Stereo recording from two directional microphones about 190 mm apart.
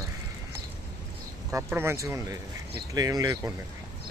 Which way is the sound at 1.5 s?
15° right (ahead or behind).